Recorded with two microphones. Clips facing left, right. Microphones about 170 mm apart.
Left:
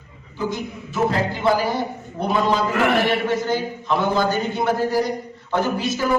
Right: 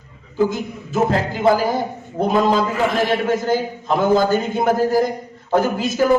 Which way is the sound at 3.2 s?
45° right (ahead or behind).